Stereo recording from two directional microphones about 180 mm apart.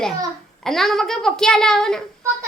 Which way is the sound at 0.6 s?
Centre (ahead or behind).